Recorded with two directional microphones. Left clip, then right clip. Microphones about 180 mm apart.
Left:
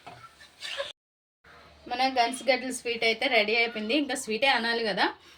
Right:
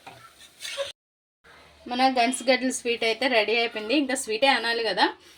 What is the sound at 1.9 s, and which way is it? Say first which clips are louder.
A woman's voice: right 3 dB; 45° right (ahead or behind).